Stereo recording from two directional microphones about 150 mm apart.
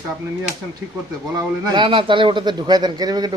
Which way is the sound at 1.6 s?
30° right (ahead or behind).